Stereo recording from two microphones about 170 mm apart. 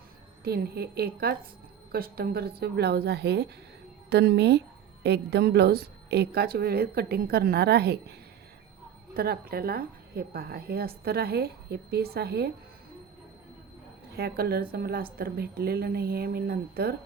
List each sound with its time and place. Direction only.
0.4 s speech: 65° right (ahead or behind)
9.1 s speech: 65° right (ahead or behind)
14.1 s speech: 65° right (ahead or behind)